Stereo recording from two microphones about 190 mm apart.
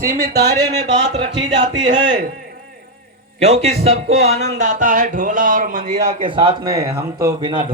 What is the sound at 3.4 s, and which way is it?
Speech, 35° right (ahead or behind).